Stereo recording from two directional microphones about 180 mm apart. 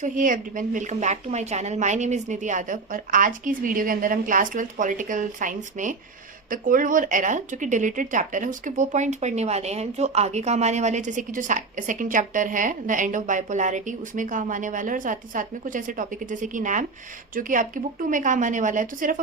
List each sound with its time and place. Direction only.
0.0 s speech: 45° right (ahead or behind)